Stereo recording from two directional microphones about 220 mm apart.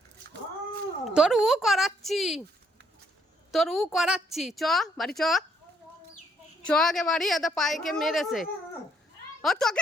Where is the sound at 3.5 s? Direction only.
Centre (ahead or behind).